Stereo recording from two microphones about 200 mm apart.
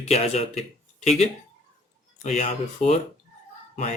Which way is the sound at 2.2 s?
35° left (ahead or behind).